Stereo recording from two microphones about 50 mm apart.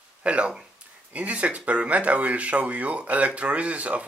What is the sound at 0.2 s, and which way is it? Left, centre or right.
Speech, right.